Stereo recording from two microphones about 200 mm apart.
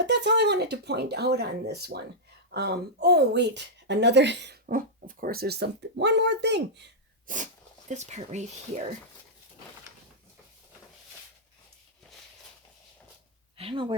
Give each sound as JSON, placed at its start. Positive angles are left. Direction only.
{"t": 0.0, "sound": "speech", "side_deg": -60}
{"t": 7.3, "sound": "speech", "side_deg": -40}
{"t": 13.6, "sound": "speech", "side_deg": -25}